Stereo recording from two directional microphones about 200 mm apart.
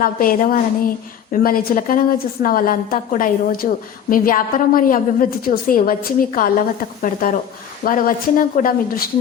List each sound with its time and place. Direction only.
0.0 s a woman's voice: 45° left (ahead or behind)